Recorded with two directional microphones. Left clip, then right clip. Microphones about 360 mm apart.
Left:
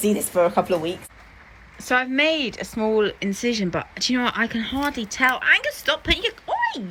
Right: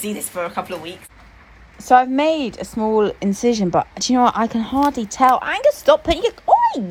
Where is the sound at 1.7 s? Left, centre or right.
Centre.